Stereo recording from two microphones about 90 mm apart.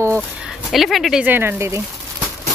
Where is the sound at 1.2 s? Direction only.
20° right (ahead or behind).